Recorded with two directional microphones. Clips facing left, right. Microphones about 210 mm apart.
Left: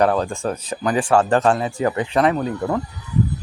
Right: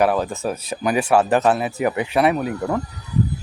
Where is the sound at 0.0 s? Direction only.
5° right (ahead or behind).